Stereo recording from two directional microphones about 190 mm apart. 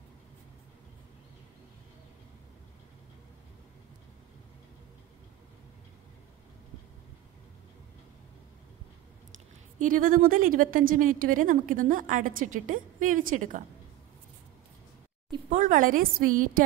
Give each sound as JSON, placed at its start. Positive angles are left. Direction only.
{"t": 9.8, "sound": "a woman's voice", "side_deg": -45}
{"t": 15.5, "sound": "a woman's voice", "side_deg": -45}